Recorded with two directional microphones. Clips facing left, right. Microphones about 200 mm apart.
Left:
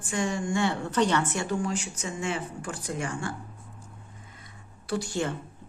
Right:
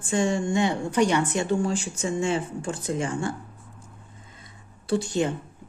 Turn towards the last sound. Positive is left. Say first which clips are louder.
# right 5 dB
turn(degrees=-20)  # may be behind; listen again after turning